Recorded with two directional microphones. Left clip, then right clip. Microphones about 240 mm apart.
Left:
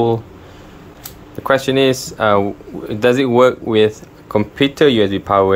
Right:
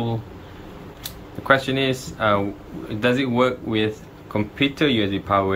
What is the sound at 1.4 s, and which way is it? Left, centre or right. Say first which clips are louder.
Speech: left 5 dB; left.